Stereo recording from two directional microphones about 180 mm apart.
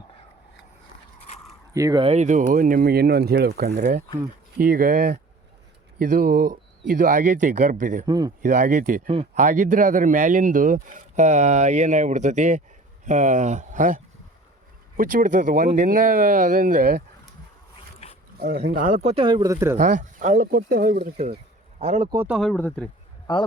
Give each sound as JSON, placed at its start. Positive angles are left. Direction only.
{"t": 1.7, "sound": "speech", "side_deg": -20}
{"t": 2.0, "sound": "speech", "side_deg": -40}
{"t": 4.5, "sound": "a man's voice", "side_deg": -55}
{"t": 8.0, "sound": "speech", "side_deg": -20}
{"t": 8.4, "sound": "a man's voice", "side_deg": -45}
{"t": 9.0, "sound": "speech", "side_deg": -30}
{"t": 9.4, "sound": "a man's voice", "side_deg": -45}
{"t": 18.3, "sound": "speech", "side_deg": -60}
{"t": 19.7, "sound": "a man's voice", "side_deg": -45}
{"t": 21.0, "sound": "speech", "side_deg": -35}
{"t": 22.3, "sound": "speech", "side_deg": 0}
{"t": 23.2, "sound": "speech", "side_deg": 25}